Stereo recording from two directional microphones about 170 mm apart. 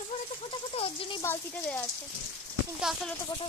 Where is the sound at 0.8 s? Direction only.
30° left (ahead or behind).